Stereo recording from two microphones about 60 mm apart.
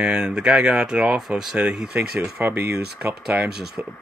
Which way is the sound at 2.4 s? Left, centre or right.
Right.